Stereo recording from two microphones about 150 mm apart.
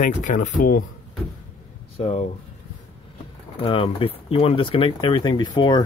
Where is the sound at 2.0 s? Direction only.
40° left (ahead or behind).